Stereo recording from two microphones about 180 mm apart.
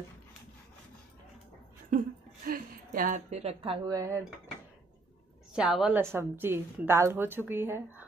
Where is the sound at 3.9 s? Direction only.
20° right (ahead or behind).